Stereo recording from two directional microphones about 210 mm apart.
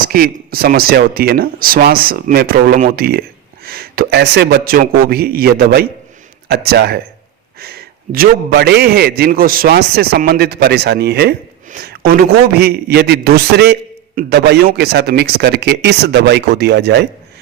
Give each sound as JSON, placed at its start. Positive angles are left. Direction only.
{"t": 0.0, "sound": "speech", "side_deg": -45}